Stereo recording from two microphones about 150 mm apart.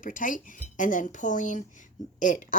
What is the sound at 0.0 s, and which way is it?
Speech, 60° left (ahead or behind).